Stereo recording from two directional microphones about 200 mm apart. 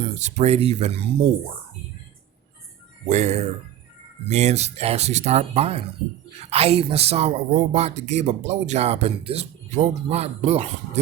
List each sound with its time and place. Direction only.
0.1 s speech: 35° right (ahead or behind)
3.1 s speech: 35° right (ahead or behind)